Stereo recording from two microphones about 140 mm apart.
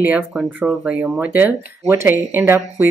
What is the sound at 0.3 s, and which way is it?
Speech, centre (ahead or behind).